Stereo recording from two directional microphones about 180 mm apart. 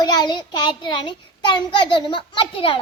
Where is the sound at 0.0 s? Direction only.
25° left (ahead or behind).